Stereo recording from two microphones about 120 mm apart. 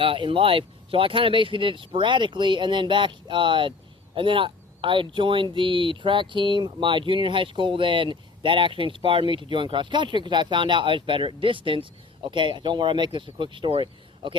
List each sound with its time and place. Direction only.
0.0 s speech: 45° right (ahead or behind)